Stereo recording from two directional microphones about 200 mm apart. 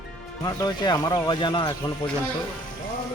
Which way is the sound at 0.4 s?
20° left (ahead or behind).